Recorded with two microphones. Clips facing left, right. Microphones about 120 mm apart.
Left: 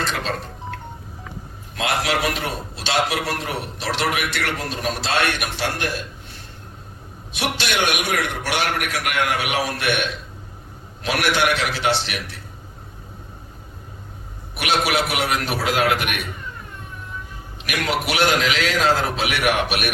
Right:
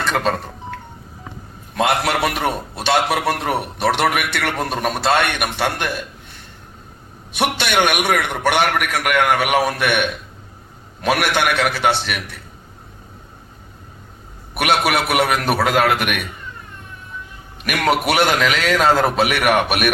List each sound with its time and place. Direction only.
0.1 s speech: 50° right (ahead or behind)
1.8 s a man's voice: 60° right (ahead or behind)
7.3 s a man's voice: 55° right (ahead or behind)
14.5 s a man's voice: 55° right (ahead or behind)
17.7 s a man's voice: 55° right (ahead or behind)